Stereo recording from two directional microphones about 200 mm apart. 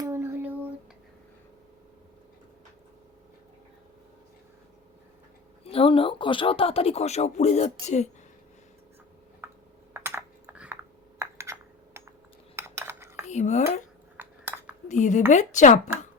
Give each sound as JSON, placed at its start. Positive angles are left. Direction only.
{"t": 0.0, "sound": "a sound", "side_deg": -10}
{"t": 5.6, "sound": "speech", "side_deg": 30}
{"t": 9.4, "sound": "tick-tock", "side_deg": -10}
{"t": 9.9, "sound": "typing", "side_deg": -15}
{"t": 11.2, "sound": "a sound", "side_deg": -15}
{"t": 12.5, "sound": "cutlery", "side_deg": -15}
{"t": 13.2, "sound": "dishes", "side_deg": 35}
{"t": 14.2, "sound": "cutlery", "side_deg": -10}
{"t": 14.8, "sound": "speech", "side_deg": 35}